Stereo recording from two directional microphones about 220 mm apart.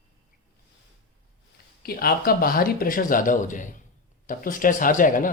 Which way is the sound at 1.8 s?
45° left (ahead or behind).